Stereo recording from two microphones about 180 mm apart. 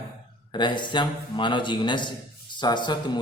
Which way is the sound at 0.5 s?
25° left (ahead or behind).